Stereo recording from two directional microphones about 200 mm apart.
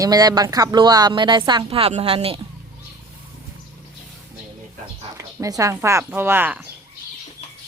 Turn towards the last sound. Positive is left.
turn(degrees=-10)  # may be behind; listen again after turning